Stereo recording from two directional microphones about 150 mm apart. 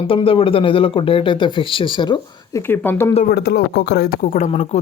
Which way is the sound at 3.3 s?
90° left.